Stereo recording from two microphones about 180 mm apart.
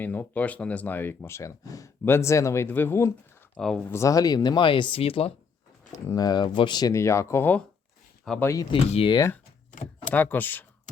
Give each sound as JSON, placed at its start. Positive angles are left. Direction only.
{"t": 0.0, "sound": "speech", "side_deg": 10}
{"t": 6.1, "sound": "speech", "side_deg": 20}
{"t": 8.7, "sound": "speech", "side_deg": 30}
{"t": 10.1, "sound": "speech", "side_deg": 10}